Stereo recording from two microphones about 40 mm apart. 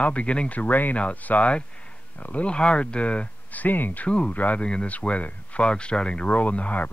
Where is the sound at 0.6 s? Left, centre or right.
Left.